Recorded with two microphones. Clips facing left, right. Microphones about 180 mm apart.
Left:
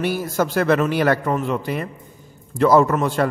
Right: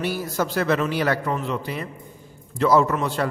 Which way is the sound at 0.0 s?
50° left (ahead or behind).